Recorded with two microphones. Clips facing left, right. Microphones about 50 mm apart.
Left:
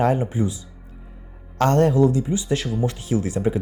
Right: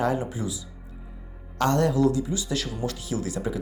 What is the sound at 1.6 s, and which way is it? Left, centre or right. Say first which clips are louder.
Speech: left 5 dB; left.